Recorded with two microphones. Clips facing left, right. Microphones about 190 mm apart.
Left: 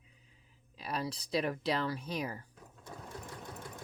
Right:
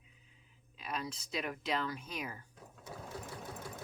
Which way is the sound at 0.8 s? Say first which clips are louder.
Left 3 dB; 35° left (ahead or behind).